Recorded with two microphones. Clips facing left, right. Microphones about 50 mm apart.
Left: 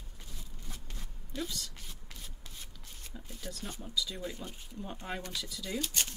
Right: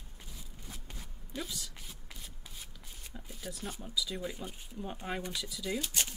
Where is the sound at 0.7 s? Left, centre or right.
Centre.